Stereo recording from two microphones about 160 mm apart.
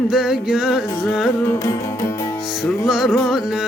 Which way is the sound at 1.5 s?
15° left (ahead or behind).